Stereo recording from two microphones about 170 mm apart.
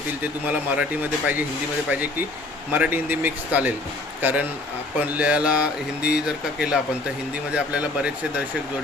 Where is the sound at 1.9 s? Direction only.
10° right (ahead or behind).